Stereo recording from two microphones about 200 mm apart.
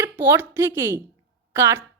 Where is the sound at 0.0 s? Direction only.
10° right (ahead or behind).